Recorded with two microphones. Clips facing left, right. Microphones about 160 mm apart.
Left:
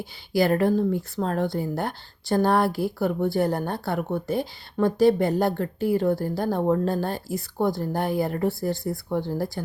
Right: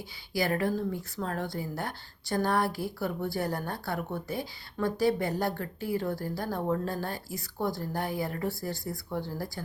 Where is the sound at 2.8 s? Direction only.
65° left (ahead or behind).